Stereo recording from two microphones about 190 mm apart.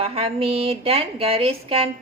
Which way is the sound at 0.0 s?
30° right (ahead or behind).